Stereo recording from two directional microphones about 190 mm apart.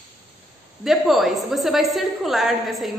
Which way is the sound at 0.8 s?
Centre (ahead or behind).